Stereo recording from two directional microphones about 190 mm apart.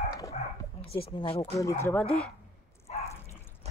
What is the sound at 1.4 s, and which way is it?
Speech, 15° left (ahead or behind).